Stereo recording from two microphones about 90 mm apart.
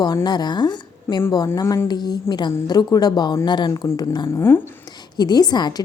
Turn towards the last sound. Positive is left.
turn(degrees=50)  # may be behind; listen again after turning